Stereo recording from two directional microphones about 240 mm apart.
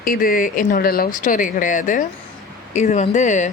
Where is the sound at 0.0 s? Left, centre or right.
Left.